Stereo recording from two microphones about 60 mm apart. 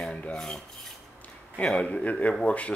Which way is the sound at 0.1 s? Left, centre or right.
Left.